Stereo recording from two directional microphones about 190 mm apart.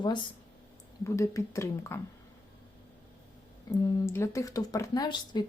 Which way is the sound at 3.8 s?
15° left (ahead or behind).